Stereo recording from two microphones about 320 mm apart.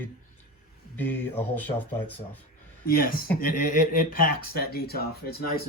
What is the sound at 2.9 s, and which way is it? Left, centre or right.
Speech, left.